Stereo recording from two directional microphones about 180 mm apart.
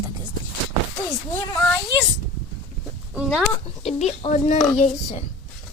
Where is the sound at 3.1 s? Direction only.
5° right (ahead or behind).